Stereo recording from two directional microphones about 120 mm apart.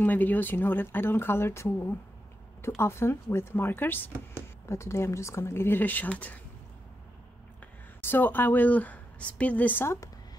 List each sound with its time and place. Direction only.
0.0 s a woman's voice: 15° left (ahead or behind)
8.0 s a woman's voice: 15° left (ahead or behind)